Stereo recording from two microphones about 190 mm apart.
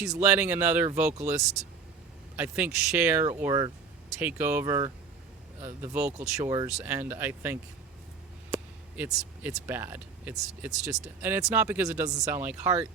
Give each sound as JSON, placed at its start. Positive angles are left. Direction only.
{"t": 0.2, "sound": "speech", "side_deg": -10}
{"t": 3.4, "sound": "speech", "side_deg": -20}
{"t": 4.2, "sound": "speech", "side_deg": -10}
{"t": 9.0, "sound": "speech", "side_deg": -15}